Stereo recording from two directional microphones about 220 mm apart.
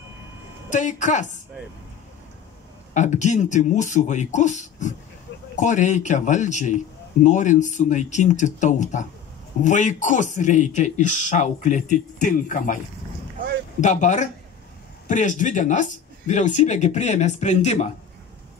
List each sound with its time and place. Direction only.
0.7 s speech: 35° left (ahead or behind)
2.9 s speech: 35° left (ahead or behind)